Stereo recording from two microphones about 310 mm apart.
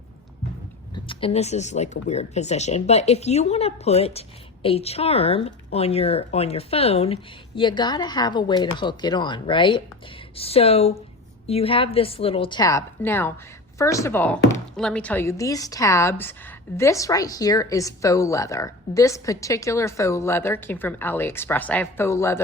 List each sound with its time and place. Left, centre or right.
0.9 s a woman's voice: centre